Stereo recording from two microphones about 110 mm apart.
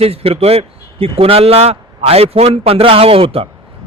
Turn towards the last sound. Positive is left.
turn(degrees=-60)  # may be behind; listen again after turning